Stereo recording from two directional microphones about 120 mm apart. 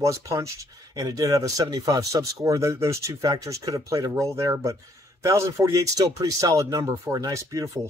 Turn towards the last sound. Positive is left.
turn(degrees=-30)  # may be behind; listen again after turning